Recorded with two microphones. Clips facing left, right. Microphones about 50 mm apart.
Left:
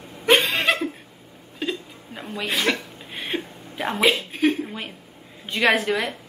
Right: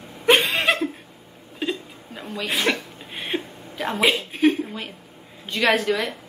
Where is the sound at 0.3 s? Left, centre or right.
Centre.